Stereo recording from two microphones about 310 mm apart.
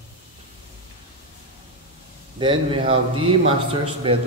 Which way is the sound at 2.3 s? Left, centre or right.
Centre.